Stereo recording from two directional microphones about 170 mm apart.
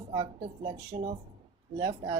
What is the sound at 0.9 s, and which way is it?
Speech, 30° right (ahead or behind).